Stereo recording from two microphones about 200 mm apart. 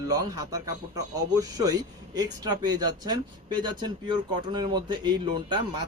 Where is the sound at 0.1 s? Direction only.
20° right (ahead or behind).